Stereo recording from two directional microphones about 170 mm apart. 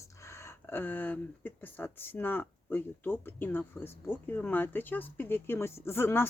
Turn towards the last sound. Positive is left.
turn(degrees=15)  # may be behind; listen again after turning